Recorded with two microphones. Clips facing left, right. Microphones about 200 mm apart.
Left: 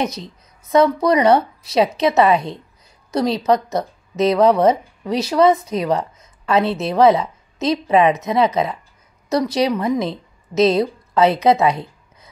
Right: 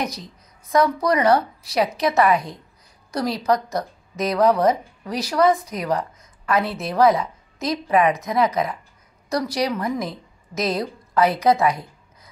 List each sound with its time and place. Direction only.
0.0 s a woman's voice: 25° left (ahead or behind)